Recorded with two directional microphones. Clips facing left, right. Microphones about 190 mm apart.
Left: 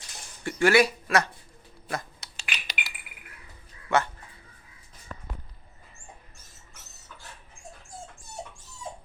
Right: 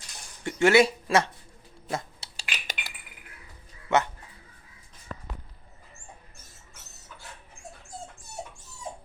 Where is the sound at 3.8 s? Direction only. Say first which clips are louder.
Right 1 dB; 20° right (ahead or behind).